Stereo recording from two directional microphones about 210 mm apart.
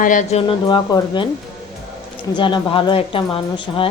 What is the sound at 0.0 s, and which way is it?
A woman's voice, 35° left (ahead or behind).